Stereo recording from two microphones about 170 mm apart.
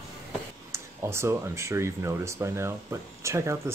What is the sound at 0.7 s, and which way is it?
Speech, 15° right (ahead or behind).